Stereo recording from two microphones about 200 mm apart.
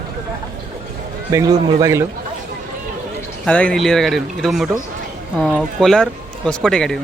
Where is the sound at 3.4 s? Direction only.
5° left (ahead or behind).